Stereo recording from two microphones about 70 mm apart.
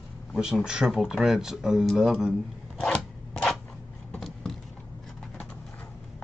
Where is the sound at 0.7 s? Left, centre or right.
Centre.